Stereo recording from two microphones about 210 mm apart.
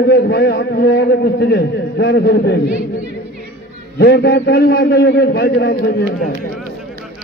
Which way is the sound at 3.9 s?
50° left (ahead or behind).